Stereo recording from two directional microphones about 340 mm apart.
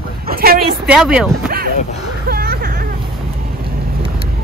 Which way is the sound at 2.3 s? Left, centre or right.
Right.